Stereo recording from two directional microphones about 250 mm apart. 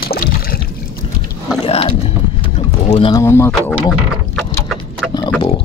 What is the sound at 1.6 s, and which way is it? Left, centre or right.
Boat, left.